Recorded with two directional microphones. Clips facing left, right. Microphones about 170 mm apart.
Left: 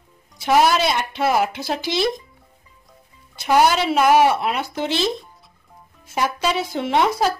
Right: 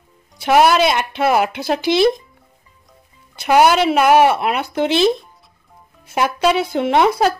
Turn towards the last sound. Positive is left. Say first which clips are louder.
# right 4 dB
turn(degrees=-60)  # may be behind; listen again after turning